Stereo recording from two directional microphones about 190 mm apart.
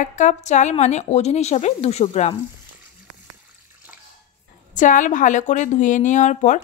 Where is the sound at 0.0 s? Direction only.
40° left (ahead or behind).